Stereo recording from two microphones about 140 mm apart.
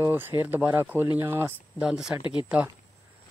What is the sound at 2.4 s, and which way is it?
Speech, 10° right (ahead or behind).